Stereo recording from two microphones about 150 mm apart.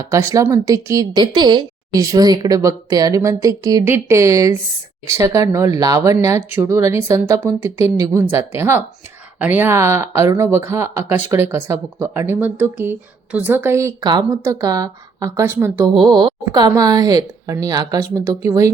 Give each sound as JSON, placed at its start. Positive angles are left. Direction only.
{"t": 0.0, "sound": "speech", "side_deg": -20}
{"t": 16.0, "sound": "speech", "side_deg": -30}